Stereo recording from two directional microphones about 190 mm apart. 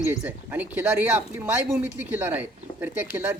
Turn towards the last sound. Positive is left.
turn(degrees=-10)  # may be behind; listen again after turning